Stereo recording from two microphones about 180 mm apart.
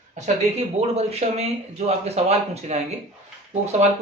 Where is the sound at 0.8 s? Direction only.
35° right (ahead or behind).